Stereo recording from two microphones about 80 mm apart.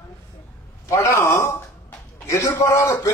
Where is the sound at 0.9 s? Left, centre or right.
Left.